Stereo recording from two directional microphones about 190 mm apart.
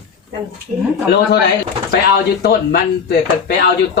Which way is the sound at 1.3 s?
60° left (ahead or behind).